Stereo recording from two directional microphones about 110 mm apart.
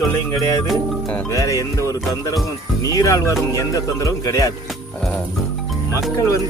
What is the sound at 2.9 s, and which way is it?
Speech, 30° left (ahead or behind).